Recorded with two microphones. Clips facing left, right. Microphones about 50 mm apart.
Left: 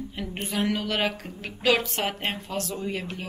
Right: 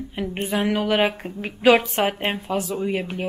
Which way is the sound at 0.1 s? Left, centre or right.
Centre.